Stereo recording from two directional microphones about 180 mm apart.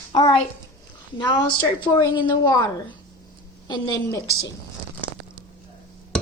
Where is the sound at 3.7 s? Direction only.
20° left (ahead or behind).